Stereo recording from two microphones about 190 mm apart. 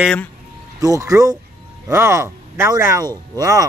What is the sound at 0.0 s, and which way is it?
Speech, 5° left (ahead or behind).